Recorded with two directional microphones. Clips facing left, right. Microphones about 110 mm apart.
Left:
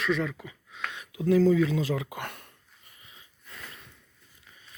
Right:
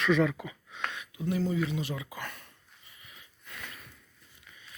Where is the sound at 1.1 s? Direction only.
90° left; by 2.4 s 60° left (ahead or behind).